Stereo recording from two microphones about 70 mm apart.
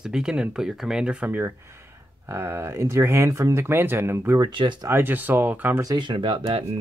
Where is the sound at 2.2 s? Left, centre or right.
Right.